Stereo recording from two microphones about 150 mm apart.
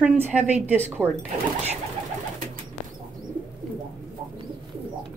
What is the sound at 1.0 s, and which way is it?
Speech, 10° left (ahead or behind).